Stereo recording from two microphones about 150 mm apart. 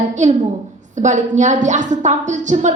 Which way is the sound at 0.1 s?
55° right (ahead or behind).